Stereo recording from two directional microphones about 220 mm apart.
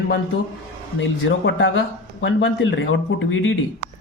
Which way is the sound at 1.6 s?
55° left (ahead or behind).